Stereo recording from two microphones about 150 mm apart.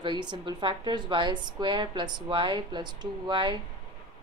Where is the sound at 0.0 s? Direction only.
30° right (ahead or behind).